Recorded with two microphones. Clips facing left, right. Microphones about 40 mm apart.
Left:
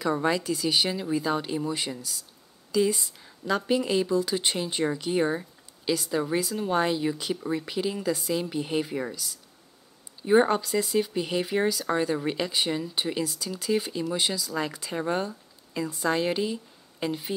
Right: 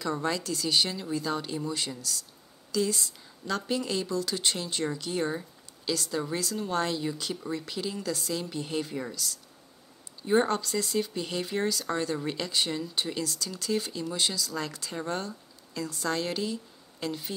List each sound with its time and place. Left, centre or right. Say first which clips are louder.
0.0 s speech: left 5 dB; centre